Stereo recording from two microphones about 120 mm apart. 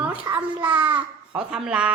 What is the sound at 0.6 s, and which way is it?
A child's voice, 15° right (ahead or behind).